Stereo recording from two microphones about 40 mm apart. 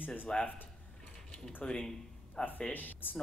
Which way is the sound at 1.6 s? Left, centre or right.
Left.